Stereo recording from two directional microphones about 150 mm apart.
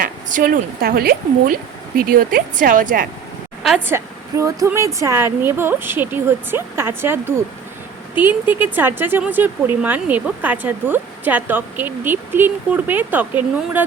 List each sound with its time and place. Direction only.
0.0 s speech: 65° right (ahead or behind)
3.8 s speech: 15° right (ahead or behind)